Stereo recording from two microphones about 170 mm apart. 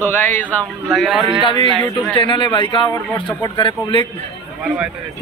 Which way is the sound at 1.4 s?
30° left (ahead or behind).